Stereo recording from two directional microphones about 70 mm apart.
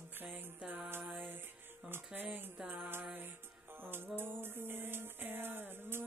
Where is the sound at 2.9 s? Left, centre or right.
Right.